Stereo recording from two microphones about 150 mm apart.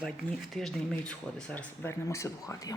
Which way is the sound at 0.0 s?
5° left (ahead or behind).